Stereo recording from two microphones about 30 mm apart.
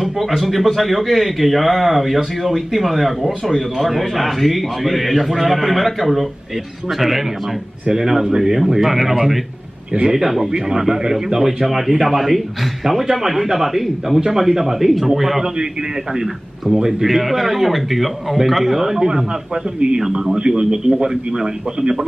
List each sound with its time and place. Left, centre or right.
0.4 s a man's voice: centre
7.9 s a man's voice: centre
8.8 s a man's voice: centre
10.2 s a man's voice: centre
10.5 s a man's voice: centre
16.1 s a man's voice: centre
17.0 s a man's voice: centre
20.3 s a man's voice: right